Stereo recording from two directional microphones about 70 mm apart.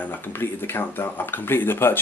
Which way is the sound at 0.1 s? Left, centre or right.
Left.